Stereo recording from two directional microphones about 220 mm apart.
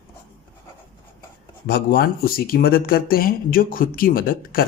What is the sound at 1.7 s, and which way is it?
Speech, 45° left (ahead or behind).